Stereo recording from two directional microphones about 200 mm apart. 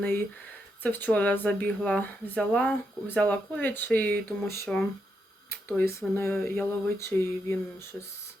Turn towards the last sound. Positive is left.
turn(degrees=10)  # may be behind; listen again after turning